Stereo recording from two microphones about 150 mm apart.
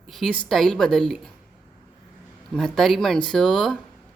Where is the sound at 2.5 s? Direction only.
Centre (ahead or behind).